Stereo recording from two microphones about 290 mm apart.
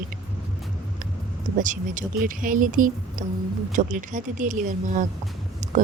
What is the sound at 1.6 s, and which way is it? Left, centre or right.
A woman's voice, right.